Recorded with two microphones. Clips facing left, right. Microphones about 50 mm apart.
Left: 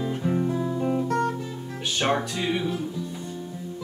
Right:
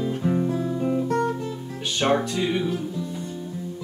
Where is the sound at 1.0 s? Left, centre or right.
Right.